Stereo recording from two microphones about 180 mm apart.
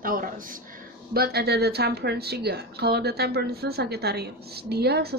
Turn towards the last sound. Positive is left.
turn(degrees=-60)  # may be behind; listen again after turning